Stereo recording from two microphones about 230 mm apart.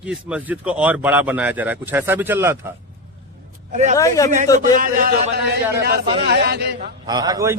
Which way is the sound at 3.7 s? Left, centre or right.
Right.